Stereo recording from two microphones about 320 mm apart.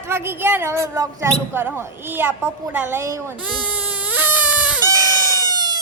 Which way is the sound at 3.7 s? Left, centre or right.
Centre.